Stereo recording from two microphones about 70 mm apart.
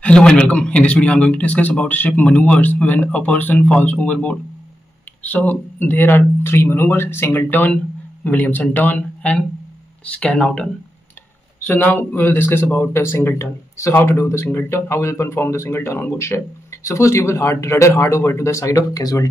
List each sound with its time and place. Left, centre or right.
0.0 s a man's voice: centre
11.6 s speech: left